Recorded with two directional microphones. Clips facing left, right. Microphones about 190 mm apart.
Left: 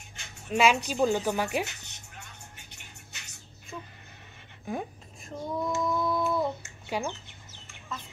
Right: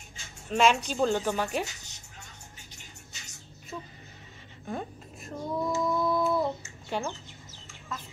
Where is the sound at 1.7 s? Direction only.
60° left (ahead or behind).